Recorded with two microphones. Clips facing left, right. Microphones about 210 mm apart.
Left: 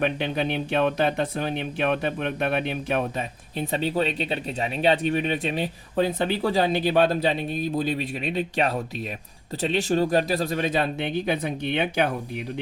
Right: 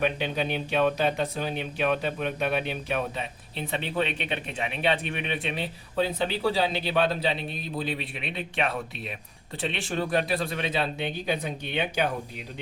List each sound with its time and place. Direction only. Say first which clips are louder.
0.7 s speech: left 1 dB; 55° left (ahead or behind)
3.7 s speech: left 4 dB; 35° left (ahead or behind)
11.3 s speech: left 4 dB; 55° left (ahead or behind)